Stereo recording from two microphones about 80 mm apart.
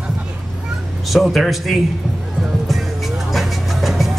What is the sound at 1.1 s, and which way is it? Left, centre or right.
Speech, centre.